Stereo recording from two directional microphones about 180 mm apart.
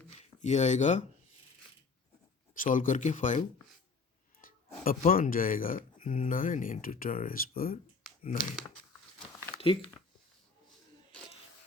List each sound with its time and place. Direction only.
0.1 s speech: 40° left (ahead or behind)
2.6 s speech: 50° left (ahead or behind)
9.6 s speech: 30° left (ahead or behind)